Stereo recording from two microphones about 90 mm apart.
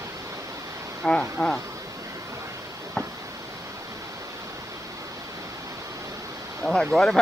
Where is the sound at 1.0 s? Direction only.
5° left (ahead or behind).